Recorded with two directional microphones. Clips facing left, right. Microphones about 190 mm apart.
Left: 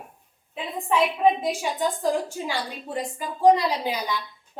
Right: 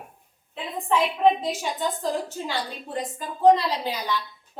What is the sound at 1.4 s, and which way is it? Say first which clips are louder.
A woman's voice: left 2 dB; 10° left (ahead or behind).